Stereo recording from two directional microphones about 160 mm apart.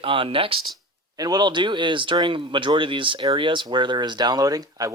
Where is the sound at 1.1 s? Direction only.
25° right (ahead or behind).